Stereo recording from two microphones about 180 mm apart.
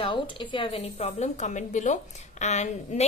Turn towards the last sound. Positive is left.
turn(degrees=40)  # may be behind; listen again after turning